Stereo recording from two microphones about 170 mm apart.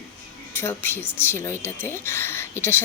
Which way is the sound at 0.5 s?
15° left (ahead or behind).